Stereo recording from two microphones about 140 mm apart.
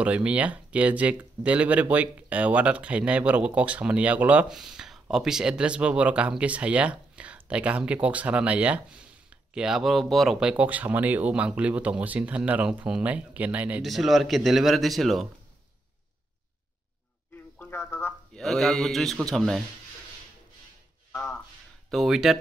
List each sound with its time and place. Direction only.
0.0 s speech: 10° right (ahead or behind)
10.6 s speech: 10° right (ahead or behind)
17.6 s a sound: 15° left (ahead or behind)
18.4 s speech: centre (ahead or behind)
21.1 s speech: 15° left (ahead or behind)
21.9 s speech: centre (ahead or behind)